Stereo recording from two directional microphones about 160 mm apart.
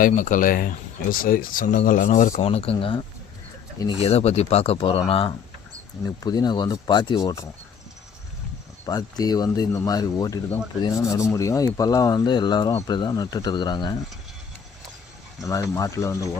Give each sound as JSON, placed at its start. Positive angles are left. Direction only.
{"t": 0.0, "sound": "speech", "side_deg": 55}
{"t": 2.4, "sound": "speech", "side_deg": 40}
{"t": 4.0, "sound": "speech", "side_deg": 40}
{"t": 8.9, "sound": "speech", "side_deg": 25}
{"t": 15.4, "sound": "speech", "side_deg": 20}